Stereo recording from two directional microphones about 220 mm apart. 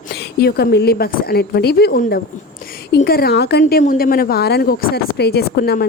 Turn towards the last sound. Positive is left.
turn(degrees=45)  # may be behind; listen again after turning